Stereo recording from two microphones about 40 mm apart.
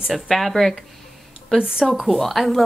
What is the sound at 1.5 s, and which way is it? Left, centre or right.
Speech, right.